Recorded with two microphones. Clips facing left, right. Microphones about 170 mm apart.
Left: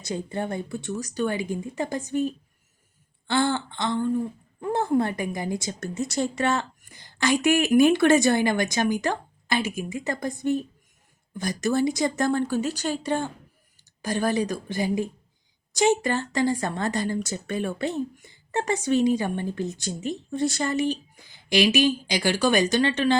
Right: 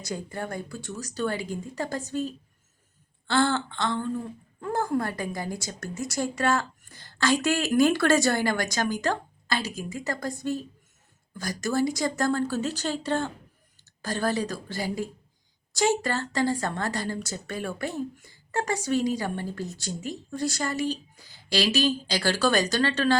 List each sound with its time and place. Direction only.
0.1 s a woman's voice: 25° left (ahead or behind)